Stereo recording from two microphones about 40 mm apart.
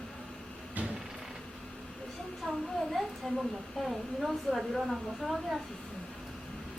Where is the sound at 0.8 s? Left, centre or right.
Right.